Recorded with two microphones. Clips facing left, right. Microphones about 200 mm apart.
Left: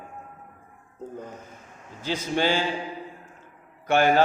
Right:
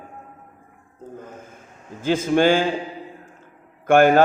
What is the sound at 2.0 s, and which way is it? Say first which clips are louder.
Speech: right 8 dB; 50° right (ahead or behind).